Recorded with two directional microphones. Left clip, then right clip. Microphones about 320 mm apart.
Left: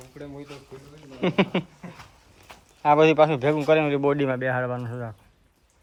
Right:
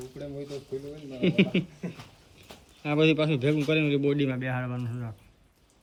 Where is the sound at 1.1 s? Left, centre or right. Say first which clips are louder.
Left 2 dB; centre.